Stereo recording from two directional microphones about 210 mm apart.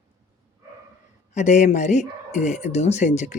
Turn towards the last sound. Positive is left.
turn(degrees=35)  # may be behind; listen again after turning